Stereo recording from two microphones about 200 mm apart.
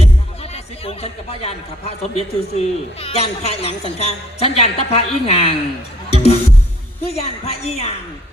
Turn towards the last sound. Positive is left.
turn(degrees=30)  # may be behind; listen again after turning